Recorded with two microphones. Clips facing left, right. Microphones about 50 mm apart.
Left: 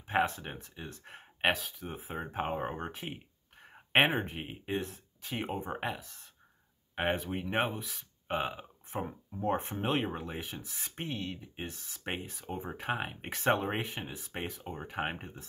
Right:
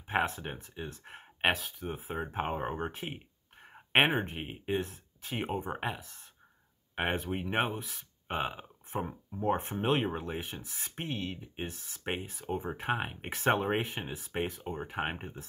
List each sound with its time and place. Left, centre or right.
0.0 s speech: centre